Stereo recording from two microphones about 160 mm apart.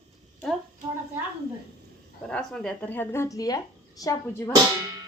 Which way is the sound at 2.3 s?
5° left (ahead or behind).